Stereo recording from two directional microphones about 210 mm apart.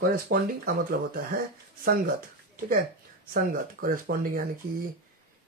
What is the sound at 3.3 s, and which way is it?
Speech, 40° right (ahead or behind).